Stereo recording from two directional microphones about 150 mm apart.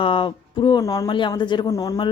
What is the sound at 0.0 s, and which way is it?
Speech, 35° left (ahead or behind).